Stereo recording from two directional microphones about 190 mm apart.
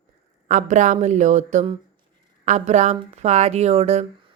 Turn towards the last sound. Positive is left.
turn(degrees=-35)  # may be behind; listen again after turning